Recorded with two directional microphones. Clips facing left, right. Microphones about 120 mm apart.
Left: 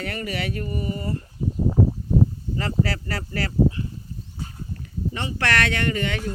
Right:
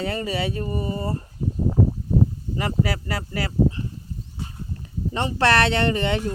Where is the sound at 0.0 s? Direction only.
25° right (ahead or behind).